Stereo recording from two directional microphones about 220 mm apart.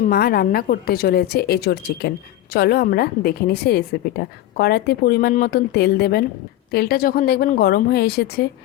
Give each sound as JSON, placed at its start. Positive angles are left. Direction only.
{"t": 0.0, "sound": "a woman's voice", "side_deg": 45}